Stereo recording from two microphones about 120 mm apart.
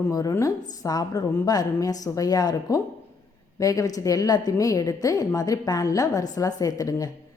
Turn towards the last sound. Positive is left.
turn(degrees=30)  # may be behind; listen again after turning